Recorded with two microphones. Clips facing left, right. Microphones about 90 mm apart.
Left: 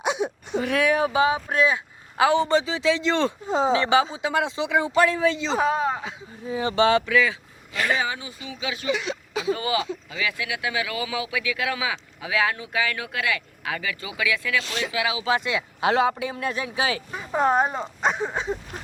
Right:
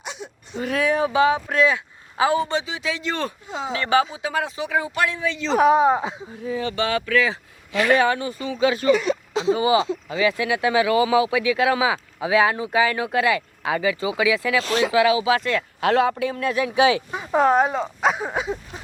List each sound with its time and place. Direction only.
0.0 s whimper: 60° left (ahead or behind)
1.5 s speech: 5° left (ahead or behind)
2.1 s a man's voice: 60° left (ahead or behind)
2.5 s speech: 35° left (ahead or behind)
5.5 s speech: 10° right (ahead or behind); by 6.2 s 30° right (ahead or behind)
6.5 s speech: 25° left (ahead or behind)
7.9 s speech: 60° right (ahead or behind); by 9.1 s 45° right (ahead or behind)
9.3 s speech: 25° right (ahead or behind)
14.6 s speech: 40° right (ahead or behind)
15.4 s speech: 5° left (ahead or behind)
16.9 s speech: 10° right (ahead or behind)
17.4 s speech: centre (ahead or behind)